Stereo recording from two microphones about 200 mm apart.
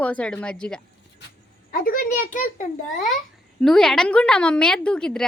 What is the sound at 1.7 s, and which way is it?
Speech, 45° left (ahead or behind).